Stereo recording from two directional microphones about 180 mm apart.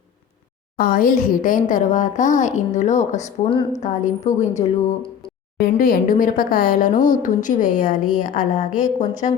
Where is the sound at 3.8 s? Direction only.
45° left (ahead or behind).